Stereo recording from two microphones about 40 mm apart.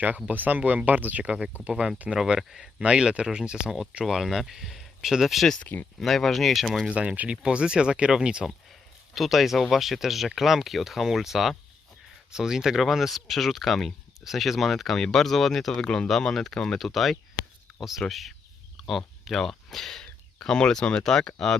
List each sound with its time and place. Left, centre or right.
0.3 s speech: right
2.1 s speech: centre
2.7 s speech: right
4.0 s speech: centre
6.0 s speech: centre
6.9 s speech: right
9.1 s speech: centre
15.8 s speech: centre
16.0 s speech: centre
21.0 s speech: centre